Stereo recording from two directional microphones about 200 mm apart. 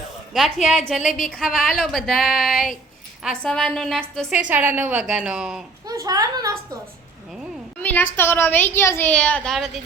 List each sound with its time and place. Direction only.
0.3 s a woman's voice: centre (ahead or behind)
5.9 s a sound: 20° right (ahead or behind)
7.8 s a woman's voice: 10° left (ahead or behind)